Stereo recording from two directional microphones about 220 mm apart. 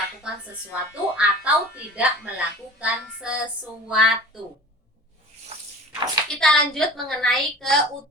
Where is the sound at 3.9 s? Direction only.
Centre (ahead or behind).